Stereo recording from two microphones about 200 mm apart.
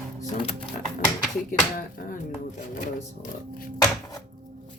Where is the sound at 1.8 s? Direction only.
40° left (ahead or behind).